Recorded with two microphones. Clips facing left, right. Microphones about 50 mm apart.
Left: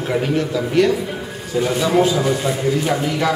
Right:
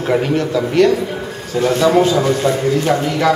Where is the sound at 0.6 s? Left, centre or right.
Centre.